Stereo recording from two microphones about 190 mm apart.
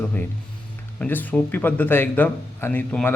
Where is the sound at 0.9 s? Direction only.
10° left (ahead or behind).